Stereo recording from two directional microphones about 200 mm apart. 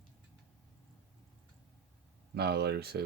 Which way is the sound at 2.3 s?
55° right (ahead or behind).